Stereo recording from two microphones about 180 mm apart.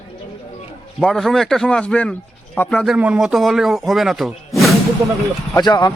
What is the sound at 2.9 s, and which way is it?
Speech, 5° right (ahead or behind).